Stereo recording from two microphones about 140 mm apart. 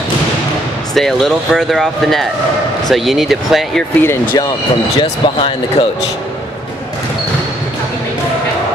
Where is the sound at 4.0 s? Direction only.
15° left (ahead or behind).